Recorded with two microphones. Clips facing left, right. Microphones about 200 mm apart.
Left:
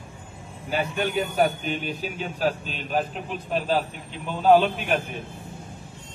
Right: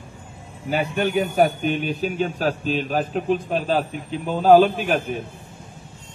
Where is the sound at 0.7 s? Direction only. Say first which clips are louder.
Right 4 dB; 55° right (ahead or behind).